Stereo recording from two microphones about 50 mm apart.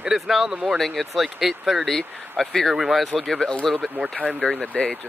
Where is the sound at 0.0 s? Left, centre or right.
Centre.